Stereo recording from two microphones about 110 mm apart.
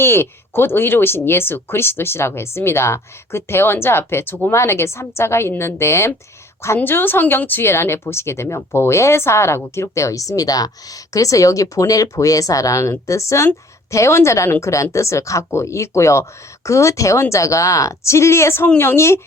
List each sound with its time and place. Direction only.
0.0 s a woman's voice: 20° left (ahead or behind)